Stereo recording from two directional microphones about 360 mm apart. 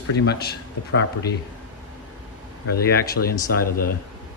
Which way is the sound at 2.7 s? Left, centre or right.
Left.